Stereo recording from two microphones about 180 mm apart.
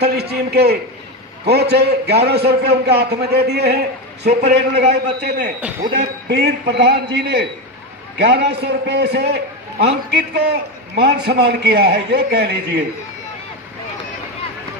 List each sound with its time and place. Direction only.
0.0 s a man's voice: 65° right (ahead or behind)